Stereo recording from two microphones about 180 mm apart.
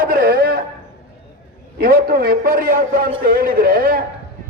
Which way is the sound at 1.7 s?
55° right (ahead or behind).